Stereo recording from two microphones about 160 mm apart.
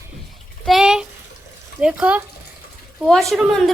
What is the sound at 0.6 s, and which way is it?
Bathtub, centre (ahead or behind).